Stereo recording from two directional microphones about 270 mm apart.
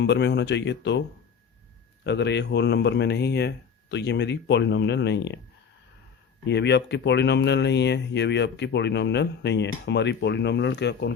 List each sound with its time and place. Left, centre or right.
0.0 s speech: left
2.0 s speech: left
6.4 s speech: left